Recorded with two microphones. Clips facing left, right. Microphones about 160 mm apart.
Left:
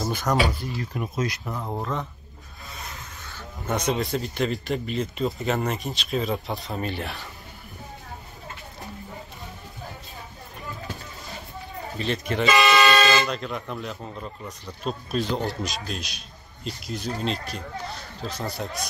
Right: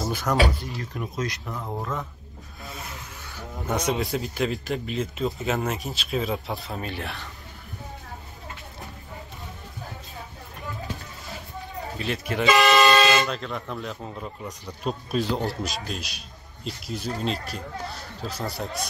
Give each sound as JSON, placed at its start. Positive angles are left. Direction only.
{"t": 0.0, "sound": "a sound", "side_deg": 0}
{"t": 0.9, "sound": "speech", "side_deg": 10}
{"t": 3.3, "sound": "speech", "side_deg": -10}
{"t": 12.0, "sound": "speech", "side_deg": -5}
{"t": 12.9, "sound": "air horn", "side_deg": -15}
{"t": 13.2, "sound": "speech", "side_deg": 5}